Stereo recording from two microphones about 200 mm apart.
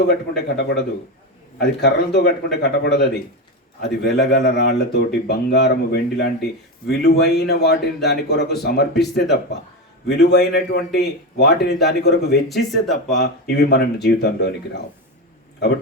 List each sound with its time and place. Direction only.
0.3 s speech: 55° left (ahead or behind)
10.1 s speech: 55° left (ahead or behind)
12.7 s speech: centre (ahead or behind)
13.1 s speech: 55° left (ahead or behind)